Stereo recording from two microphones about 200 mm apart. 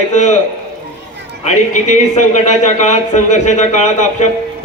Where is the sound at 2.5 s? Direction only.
35° left (ahead or behind).